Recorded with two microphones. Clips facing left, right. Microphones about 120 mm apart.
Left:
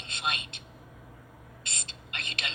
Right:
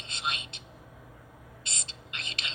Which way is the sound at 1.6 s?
55° left (ahead or behind).